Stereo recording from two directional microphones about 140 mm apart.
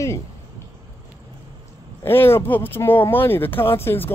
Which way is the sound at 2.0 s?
15° left (ahead or behind).